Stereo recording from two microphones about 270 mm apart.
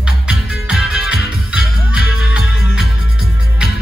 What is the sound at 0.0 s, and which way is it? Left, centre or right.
Music, centre.